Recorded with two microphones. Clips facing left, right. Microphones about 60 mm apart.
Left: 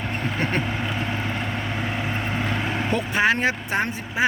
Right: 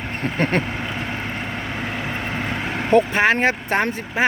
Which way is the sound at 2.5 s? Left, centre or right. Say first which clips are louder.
Right 9 dB; right.